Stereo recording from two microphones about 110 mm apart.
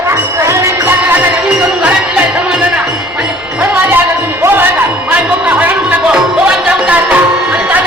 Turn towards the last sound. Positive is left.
turn(degrees=-10)  # may be behind; listen again after turning